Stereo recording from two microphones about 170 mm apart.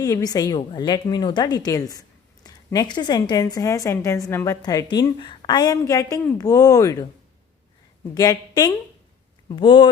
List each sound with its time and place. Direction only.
0.0 s speech: 20° left (ahead or behind)
8.1 s speech: 20° left (ahead or behind)